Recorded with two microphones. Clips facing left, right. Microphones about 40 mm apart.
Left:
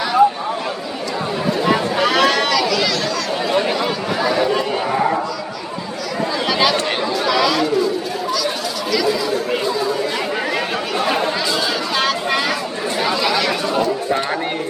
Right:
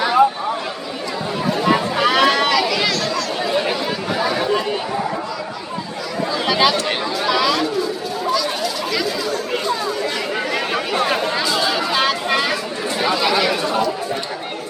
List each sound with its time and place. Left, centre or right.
0.0 s a sound: centre
1.6 s chatter: centre
3.5 s chatter: centre
6.5 s chatter: centre
11.5 s a sound: centre
13.0 s chatter: centre